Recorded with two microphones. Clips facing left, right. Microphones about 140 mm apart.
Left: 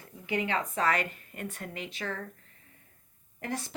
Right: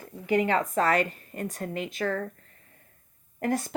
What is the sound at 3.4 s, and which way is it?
Speech, 50° right (ahead or behind).